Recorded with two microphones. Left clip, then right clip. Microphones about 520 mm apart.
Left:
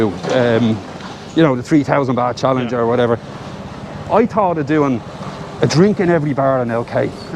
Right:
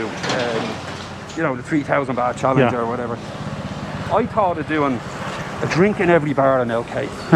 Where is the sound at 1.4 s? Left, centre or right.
Left.